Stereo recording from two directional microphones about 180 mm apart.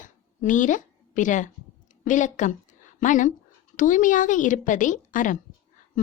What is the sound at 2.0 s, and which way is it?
A woman's voice, 45° left (ahead or behind).